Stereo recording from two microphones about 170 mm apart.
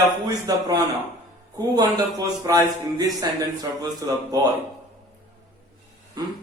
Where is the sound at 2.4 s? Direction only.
20° right (ahead or behind).